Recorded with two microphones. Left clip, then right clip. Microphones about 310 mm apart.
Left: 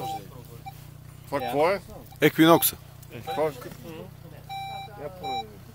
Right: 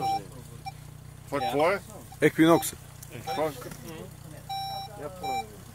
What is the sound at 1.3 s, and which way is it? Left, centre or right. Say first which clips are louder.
Speech: left 1 dB; left.